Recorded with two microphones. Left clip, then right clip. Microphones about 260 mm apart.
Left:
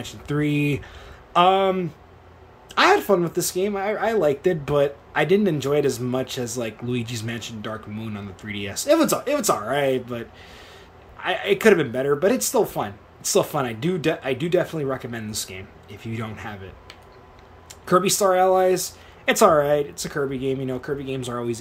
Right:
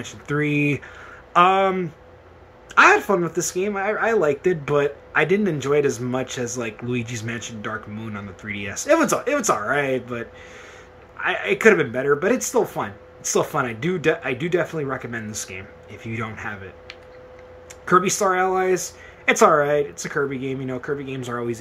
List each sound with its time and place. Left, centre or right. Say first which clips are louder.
0.3 s speech: right 2 dB; centre
17.8 s speech: right 1 dB; centre